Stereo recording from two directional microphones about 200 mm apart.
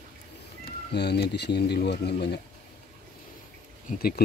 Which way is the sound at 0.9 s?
55° left (ahead or behind).